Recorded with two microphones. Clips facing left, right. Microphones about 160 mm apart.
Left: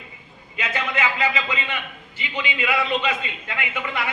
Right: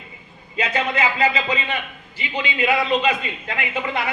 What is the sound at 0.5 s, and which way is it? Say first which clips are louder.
A man's voice: right 4 dB; 30° right (ahead or behind).